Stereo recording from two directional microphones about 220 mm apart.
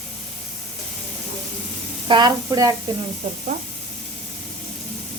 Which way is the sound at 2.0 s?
20° right (ahead or behind).